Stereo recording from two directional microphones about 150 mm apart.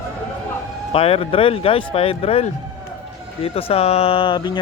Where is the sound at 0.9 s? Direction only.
40° left (ahead or behind).